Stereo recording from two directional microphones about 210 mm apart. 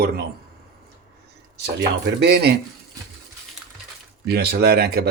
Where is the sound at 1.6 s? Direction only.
55° right (ahead or behind).